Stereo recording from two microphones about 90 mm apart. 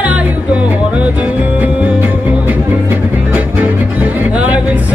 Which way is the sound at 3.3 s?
15° right (ahead or behind).